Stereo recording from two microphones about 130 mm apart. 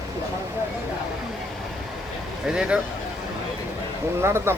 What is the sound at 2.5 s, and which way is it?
Speech, 5° right (ahead or behind).